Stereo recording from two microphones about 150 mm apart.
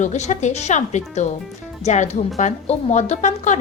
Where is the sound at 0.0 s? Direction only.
50° left (ahead or behind).